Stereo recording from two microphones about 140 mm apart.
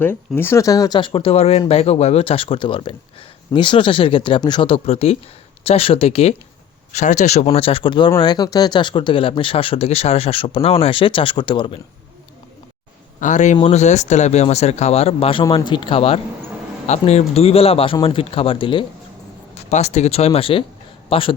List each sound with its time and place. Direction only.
0.0 s speech: 15° left (ahead or behind); by 6.3 s 45° left (ahead or behind)
6.9 s speech: 55° left (ahead or behind); by 11.8 s 35° left (ahead or behind)
13.1 s a man's voice: 60° left (ahead or behind)
13.6 s speech: 50° left (ahead or behind)
19.5 s a man's voice: 50° left (ahead or behind)